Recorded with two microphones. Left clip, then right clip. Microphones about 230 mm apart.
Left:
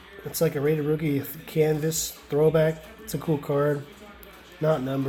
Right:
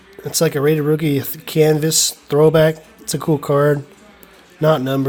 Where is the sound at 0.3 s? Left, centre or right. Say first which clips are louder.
Right 8 dB; right.